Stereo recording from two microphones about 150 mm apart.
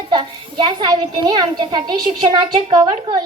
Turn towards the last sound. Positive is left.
turn(degrees=-35)  # may be behind; listen again after turning